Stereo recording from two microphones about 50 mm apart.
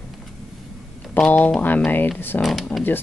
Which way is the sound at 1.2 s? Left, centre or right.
Left.